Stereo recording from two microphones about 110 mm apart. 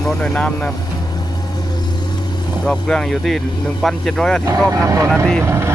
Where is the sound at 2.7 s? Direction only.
5° left (ahead or behind).